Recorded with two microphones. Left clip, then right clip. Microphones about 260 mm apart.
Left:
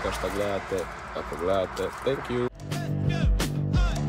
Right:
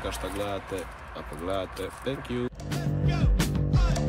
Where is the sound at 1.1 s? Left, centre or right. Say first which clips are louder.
Left 6 dB; centre.